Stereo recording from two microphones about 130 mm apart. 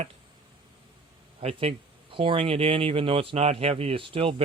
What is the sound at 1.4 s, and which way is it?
Speech, 50° right (ahead or behind).